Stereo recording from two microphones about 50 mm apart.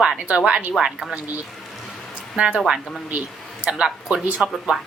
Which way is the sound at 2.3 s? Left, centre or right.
Centre.